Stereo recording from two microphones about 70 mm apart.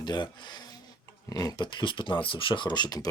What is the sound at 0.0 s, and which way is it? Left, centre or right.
Speech, left.